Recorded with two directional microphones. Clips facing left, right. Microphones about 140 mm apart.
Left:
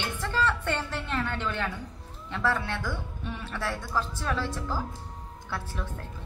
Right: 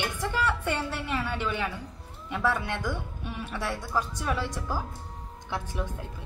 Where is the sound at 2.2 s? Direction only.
15° right (ahead or behind).